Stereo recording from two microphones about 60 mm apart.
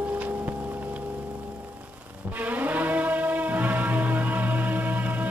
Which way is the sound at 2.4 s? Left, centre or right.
Right.